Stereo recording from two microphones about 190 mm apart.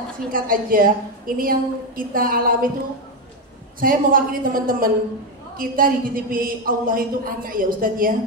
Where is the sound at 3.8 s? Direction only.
50° right (ahead or behind).